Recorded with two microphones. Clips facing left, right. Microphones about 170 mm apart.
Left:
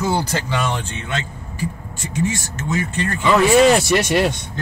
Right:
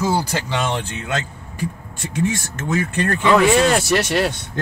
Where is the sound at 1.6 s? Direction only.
55° right (ahead or behind).